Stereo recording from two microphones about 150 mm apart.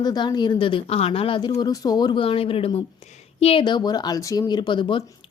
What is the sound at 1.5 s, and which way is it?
Speech, 25° left (ahead or behind).